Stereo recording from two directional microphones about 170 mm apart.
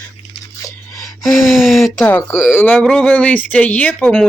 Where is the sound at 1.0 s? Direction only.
Centre (ahead or behind).